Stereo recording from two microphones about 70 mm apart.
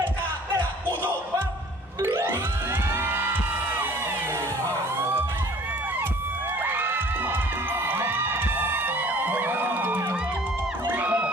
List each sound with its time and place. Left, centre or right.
2.0 s music: right
6.6 s music: right
10.8 s music: right